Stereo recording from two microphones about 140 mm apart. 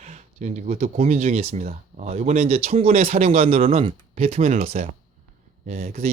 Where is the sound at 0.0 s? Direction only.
50° right (ahead or behind).